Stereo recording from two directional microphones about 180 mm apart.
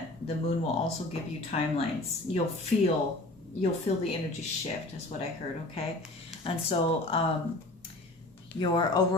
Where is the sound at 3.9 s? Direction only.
35° left (ahead or behind).